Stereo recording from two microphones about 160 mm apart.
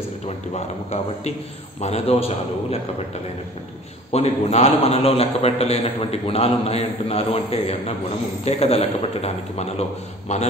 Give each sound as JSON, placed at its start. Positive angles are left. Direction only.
{"t": 0.6, "sound": "a man's voice", "side_deg": 40}
{"t": 4.1, "sound": "a man's voice", "side_deg": 40}